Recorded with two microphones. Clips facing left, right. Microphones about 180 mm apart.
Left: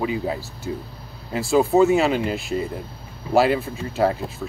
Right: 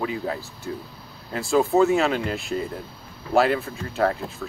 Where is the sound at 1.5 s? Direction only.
15° left (ahead or behind).